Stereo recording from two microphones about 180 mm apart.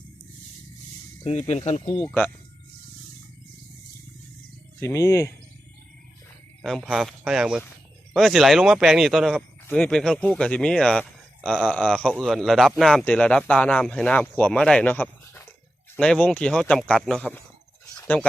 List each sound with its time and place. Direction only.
1.2 s speech: 35° left (ahead or behind)
2.0 s speech: 5° left (ahead or behind)
4.8 s speech: 15° left (ahead or behind)
6.6 s speech: centre (ahead or behind)
11.7 s speech: 5° left (ahead or behind)